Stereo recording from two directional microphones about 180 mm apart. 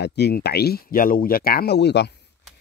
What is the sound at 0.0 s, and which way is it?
Speech, 65° left (ahead or behind).